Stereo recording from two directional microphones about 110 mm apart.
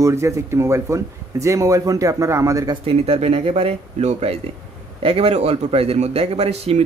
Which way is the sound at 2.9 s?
65° right (ahead or behind).